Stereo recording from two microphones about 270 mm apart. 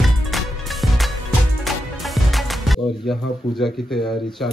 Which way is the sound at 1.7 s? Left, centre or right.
Centre.